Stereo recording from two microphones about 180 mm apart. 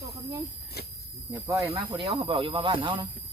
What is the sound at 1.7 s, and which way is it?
Speech, 30° right (ahead or behind).